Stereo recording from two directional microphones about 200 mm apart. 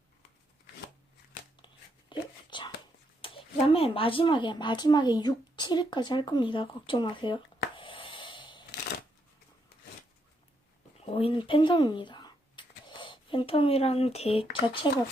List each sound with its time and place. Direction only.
1.6 s whispering: 25° left (ahead or behind)
3.2 s speech: 25° left (ahead or behind)
11.1 s speech: 30° left (ahead or behind)